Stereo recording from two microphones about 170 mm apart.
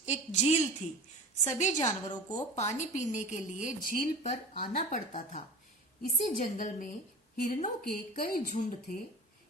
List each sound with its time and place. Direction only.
0.0 s a woman's voice: 45° left (ahead or behind)